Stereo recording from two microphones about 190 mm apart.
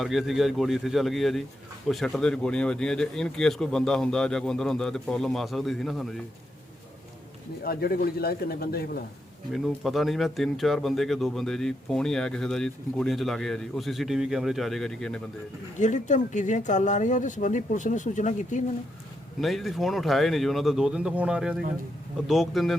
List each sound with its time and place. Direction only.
0.0 s speech: centre (ahead or behind)
7.6 s speech: 50° left (ahead or behind)
9.5 s speech: centre (ahead or behind)
15.8 s speech: 40° left (ahead or behind)
19.4 s speech: centre (ahead or behind)